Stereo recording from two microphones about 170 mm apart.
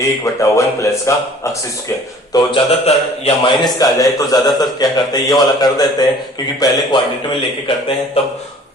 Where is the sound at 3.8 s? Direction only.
20° left (ahead or behind).